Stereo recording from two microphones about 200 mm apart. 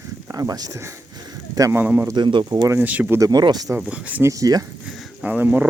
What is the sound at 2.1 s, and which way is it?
Speech, 20° right (ahead or behind).